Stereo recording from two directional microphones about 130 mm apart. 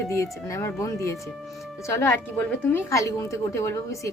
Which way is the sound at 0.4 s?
25° left (ahead or behind).